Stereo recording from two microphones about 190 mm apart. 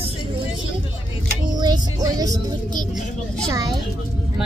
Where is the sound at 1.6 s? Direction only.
20° right (ahead or behind).